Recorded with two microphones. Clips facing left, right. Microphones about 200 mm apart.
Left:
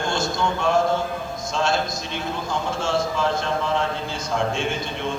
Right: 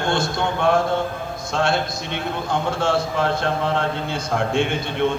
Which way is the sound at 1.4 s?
60° right (ahead or behind).